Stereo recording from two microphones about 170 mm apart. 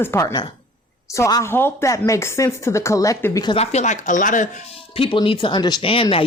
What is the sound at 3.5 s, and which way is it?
Speech, 40° left (ahead or behind).